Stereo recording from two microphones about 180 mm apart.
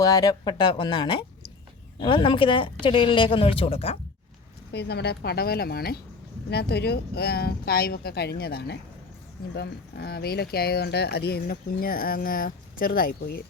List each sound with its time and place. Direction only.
0.0 s speech: 20° left (ahead or behind)
4.7 s speech: 65° left (ahead or behind)